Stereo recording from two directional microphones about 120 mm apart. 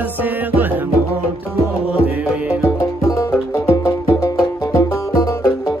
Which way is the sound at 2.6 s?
25° left (ahead or behind).